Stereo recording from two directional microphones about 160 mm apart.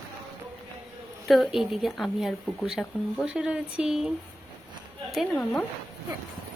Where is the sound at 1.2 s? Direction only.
Centre (ahead or behind).